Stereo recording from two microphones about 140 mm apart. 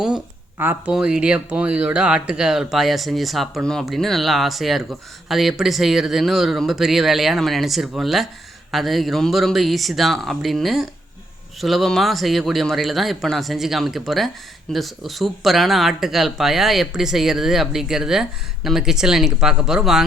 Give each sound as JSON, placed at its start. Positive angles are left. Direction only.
{"t": 0.6, "sound": "speech", "side_deg": -15}